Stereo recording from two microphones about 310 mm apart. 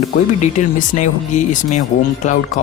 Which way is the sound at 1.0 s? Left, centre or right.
Left.